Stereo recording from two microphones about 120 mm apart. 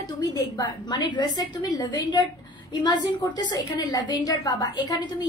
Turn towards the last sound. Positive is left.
turn(degrees=35)  # may be behind; listen again after turning